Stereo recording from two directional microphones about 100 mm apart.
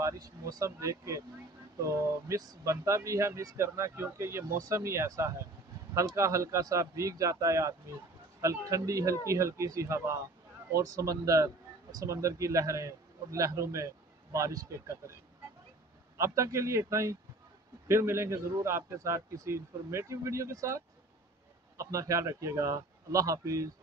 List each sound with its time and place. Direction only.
0.0 s speech: 35° right (ahead or behind)
16.2 s speech: 30° right (ahead or behind)